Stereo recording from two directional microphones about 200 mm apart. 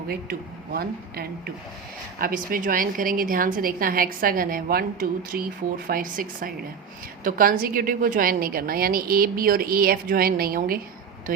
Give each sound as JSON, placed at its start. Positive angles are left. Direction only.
{"t": 0.1, "sound": "a woman's voice", "side_deg": -50}